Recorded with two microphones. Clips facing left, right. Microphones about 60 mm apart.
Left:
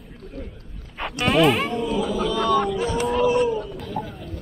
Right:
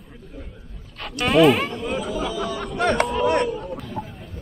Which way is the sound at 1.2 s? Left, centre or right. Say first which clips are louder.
Right 2 dB; centre.